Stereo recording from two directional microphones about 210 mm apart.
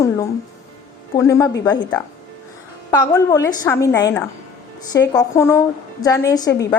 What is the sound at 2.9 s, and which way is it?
A woman's voice, 20° left (ahead or behind).